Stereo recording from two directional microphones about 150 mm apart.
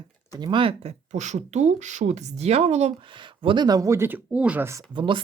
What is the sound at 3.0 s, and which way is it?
Speech, 30° right (ahead or behind).